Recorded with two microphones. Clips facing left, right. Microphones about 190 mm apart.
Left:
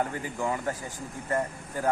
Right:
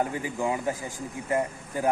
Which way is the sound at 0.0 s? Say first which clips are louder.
Right 2 dB; 10° right (ahead or behind).